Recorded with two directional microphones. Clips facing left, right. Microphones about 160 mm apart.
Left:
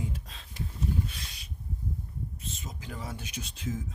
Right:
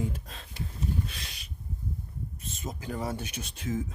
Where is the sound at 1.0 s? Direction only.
80° right.